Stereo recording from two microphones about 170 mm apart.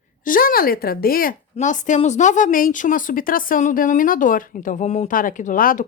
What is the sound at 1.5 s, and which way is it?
A woman's voice, 45° left (ahead or behind).